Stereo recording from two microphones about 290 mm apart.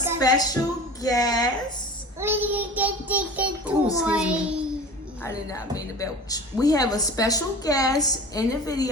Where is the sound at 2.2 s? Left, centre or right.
Centre.